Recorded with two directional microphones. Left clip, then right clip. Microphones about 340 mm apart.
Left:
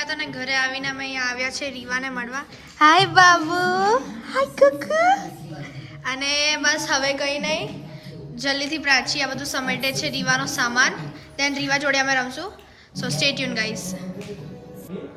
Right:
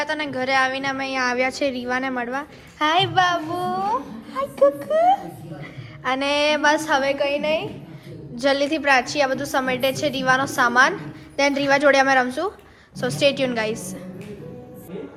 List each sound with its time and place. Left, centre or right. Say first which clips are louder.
0.0 s a woman's voice: right 3 dB; centre
6.0 s a woman's voice: right 2 dB; centre